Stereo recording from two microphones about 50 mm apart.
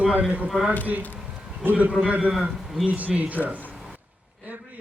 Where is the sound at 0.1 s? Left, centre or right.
Right.